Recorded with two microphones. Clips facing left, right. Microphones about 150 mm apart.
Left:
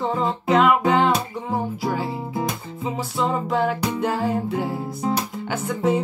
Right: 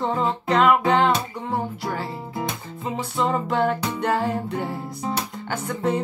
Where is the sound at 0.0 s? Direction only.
Centre (ahead or behind).